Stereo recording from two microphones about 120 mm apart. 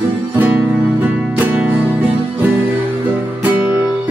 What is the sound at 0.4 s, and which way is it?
Music, 15° right (ahead or behind).